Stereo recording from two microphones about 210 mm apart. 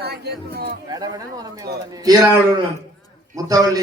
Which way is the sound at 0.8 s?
20° right (ahead or behind).